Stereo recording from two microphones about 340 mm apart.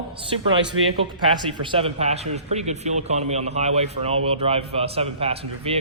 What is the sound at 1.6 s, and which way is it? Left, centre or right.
A man's voice, centre.